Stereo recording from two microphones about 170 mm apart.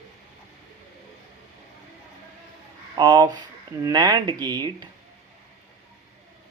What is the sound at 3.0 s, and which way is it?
Speech, 25° right (ahead or behind).